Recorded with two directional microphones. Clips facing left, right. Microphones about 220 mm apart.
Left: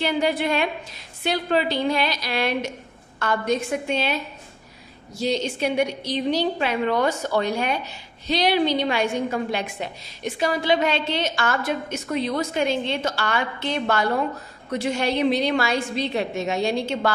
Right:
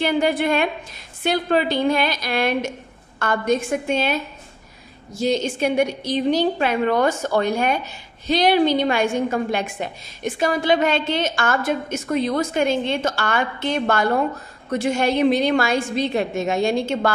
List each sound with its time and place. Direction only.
0.0 s a woman's voice: 50° right (ahead or behind)